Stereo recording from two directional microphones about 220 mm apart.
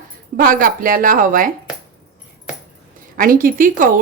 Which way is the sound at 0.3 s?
40° right (ahead or behind).